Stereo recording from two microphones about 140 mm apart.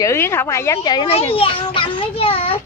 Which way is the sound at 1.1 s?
45° left (ahead or behind).